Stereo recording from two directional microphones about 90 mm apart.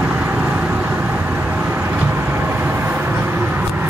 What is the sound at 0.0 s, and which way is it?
Vehicle, 20° right (ahead or behind).